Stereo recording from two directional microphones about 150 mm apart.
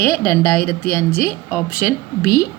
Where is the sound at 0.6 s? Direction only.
75° left (ahead or behind).